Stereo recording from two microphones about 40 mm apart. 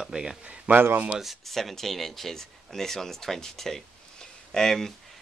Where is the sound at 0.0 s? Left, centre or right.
Centre.